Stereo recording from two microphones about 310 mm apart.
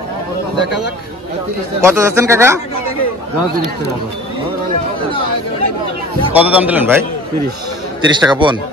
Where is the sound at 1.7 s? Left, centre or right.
Centre.